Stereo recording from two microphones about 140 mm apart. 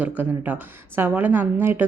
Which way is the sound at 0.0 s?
10° right (ahead or behind).